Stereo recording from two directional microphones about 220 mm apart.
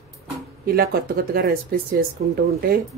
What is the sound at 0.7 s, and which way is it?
Speech, 45° right (ahead or behind).